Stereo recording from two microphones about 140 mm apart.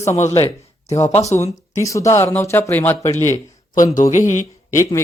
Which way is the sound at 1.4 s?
20° left (ahead or behind).